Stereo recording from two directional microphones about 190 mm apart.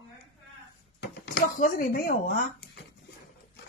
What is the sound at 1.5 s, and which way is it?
Speech, 45° left (ahead or behind).